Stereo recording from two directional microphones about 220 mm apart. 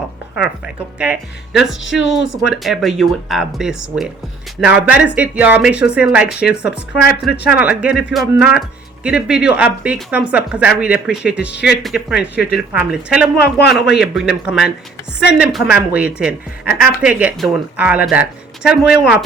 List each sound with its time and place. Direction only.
0.9 s speech: 5° right (ahead or behind)
13.4 s speech: 50° left (ahead or behind)
13.7 s speech: centre (ahead or behind)